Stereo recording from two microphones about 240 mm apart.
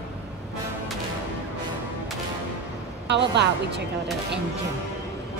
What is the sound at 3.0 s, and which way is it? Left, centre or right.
Speech, right.